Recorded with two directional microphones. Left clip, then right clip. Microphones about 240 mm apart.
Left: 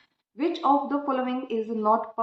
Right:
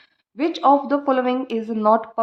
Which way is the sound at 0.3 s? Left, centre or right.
Right.